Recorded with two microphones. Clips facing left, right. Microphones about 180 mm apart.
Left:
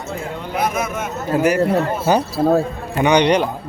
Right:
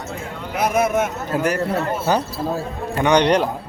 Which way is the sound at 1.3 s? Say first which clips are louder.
Left 8 dB; 10° left (ahead or behind).